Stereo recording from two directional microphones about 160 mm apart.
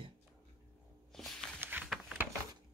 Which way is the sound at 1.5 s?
10° right (ahead or behind).